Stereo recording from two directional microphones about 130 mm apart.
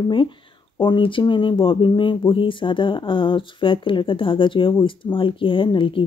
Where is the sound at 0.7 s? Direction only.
40° left (ahead or behind).